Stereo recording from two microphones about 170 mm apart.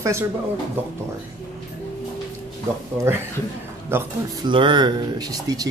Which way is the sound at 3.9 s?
25° right (ahead or behind).